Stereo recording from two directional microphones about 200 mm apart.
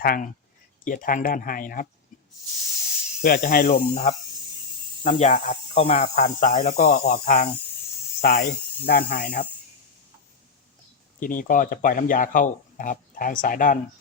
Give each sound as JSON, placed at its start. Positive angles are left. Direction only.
{"t": 0.0, "sound": "speech", "side_deg": 45}
{"t": 3.2, "sound": "speech", "side_deg": 45}
{"t": 8.2, "sound": "speech", "side_deg": 50}
{"t": 11.2, "sound": "speech", "side_deg": 45}